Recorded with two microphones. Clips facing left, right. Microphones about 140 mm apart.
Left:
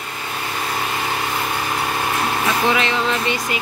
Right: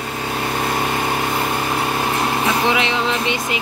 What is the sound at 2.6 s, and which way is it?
Speech, 20° right (ahead or behind).